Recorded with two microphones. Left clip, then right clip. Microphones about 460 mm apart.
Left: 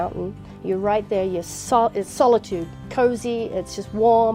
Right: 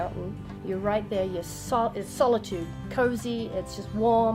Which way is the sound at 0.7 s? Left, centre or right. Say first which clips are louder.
Left 7 dB; left.